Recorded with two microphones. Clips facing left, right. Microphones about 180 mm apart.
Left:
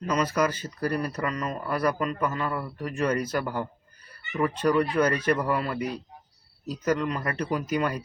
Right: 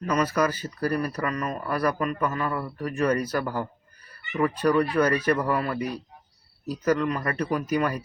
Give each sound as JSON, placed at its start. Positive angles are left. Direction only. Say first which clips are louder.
{"t": 0.0, "sound": "speech", "louder": "right 1 dB", "side_deg": 25}